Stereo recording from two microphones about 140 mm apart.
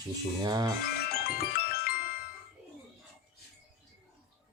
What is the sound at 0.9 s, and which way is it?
Music, 90° left.